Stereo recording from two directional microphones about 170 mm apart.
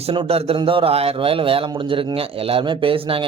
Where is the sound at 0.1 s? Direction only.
35° right (ahead or behind).